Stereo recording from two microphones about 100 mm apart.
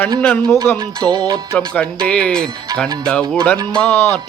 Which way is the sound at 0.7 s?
20° left (ahead or behind).